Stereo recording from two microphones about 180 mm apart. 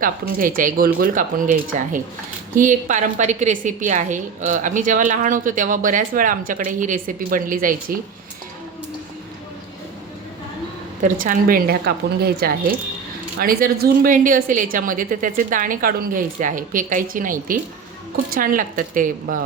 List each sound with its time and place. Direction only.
0.0 s speech: 50° right (ahead or behind)
11.0 s a woman's voice: 50° right (ahead or behind)